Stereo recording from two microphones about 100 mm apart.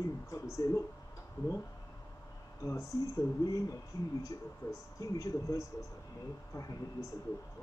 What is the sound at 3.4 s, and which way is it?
Speech, 35° left (ahead or behind).